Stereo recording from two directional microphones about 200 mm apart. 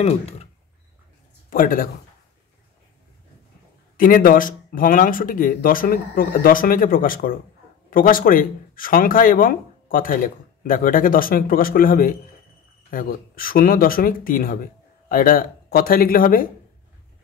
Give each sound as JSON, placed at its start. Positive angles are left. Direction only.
{"t": 0.0, "sound": "speech", "side_deg": 30}
{"t": 1.5, "sound": "speech", "side_deg": 45}
{"t": 3.9, "sound": "speech", "side_deg": 45}